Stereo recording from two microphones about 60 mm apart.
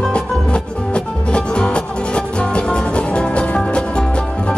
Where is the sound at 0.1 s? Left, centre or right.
Centre.